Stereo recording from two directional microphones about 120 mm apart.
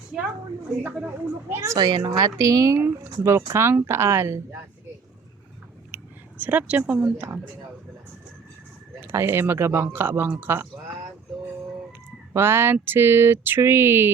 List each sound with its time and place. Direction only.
0.1 s a woman's voice: 10° right (ahead or behind)
5.9 s speech: 15° right (ahead or behind)
9.0 s a woman's voice: 20° right (ahead or behind)
12.3 s a woman's voice: 20° right (ahead or behind)